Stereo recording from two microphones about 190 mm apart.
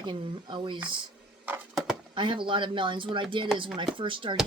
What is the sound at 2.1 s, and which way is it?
Speech, 25° right (ahead or behind).